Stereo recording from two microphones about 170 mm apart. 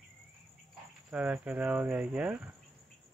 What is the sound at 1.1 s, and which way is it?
Speech, 5° right (ahead or behind).